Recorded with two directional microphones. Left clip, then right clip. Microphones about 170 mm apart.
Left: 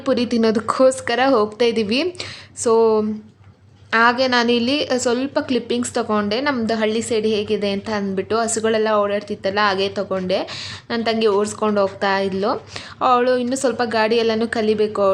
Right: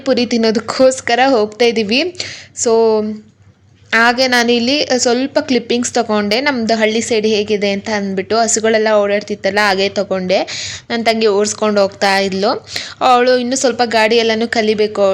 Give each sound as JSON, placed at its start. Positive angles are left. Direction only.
{"t": 0.0, "sound": "a woman's voice", "side_deg": -10}